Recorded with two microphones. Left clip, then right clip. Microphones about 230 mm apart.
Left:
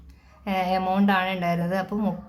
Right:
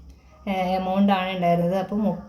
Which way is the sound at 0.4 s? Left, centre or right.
Left.